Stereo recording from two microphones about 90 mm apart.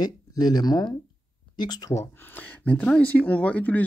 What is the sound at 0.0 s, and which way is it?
Speech, 45° left (ahead or behind).